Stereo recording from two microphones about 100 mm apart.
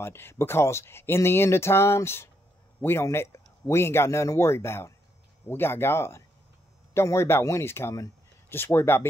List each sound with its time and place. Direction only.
0.0 s a man's voice: 25° left (ahead or behind)